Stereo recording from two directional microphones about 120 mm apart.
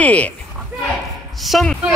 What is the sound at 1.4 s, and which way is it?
Speech, centre (ahead or behind).